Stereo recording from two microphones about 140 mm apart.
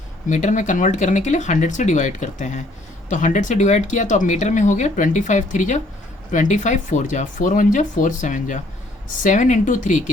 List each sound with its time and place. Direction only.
0.3 s speech: 60° left (ahead or behind)